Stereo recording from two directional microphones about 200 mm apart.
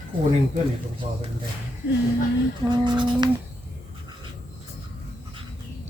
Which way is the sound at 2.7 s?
20° right (ahead or behind).